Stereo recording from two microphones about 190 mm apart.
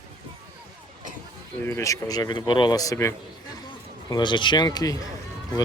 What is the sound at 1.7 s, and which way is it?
Speech, 15° left (ahead or behind).